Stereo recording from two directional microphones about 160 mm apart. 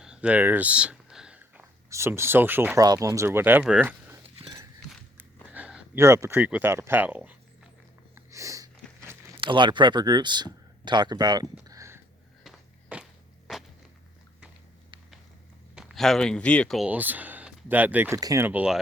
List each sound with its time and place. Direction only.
0.0 s speech: 5° right (ahead or behind)
5.5 s speech: 10° right (ahead or behind)
8.1 s sniff: 20° right (ahead or behind)
9.4 s speech: 30° right (ahead or behind)
11.6 s a sound: 20° right (ahead or behind)
12.4 s a sound: 5° right (ahead or behind)
15.7 s speech: centre (ahead or behind)